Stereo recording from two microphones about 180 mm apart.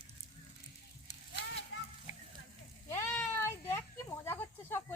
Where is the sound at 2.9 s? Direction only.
15° left (ahead or behind).